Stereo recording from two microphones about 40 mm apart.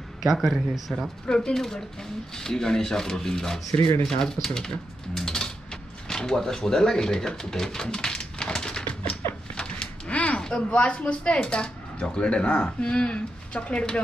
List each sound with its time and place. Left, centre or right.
0.2 s speech: centre
1.3 s speech: centre
9.6 s a sound: left
10.4 s speech: left